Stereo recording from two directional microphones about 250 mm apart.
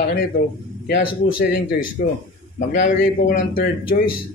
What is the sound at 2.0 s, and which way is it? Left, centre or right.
Speech, left.